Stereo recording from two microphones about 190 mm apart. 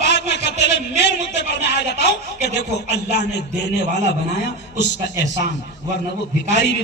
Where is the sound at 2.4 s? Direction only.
65° left (ahead or behind).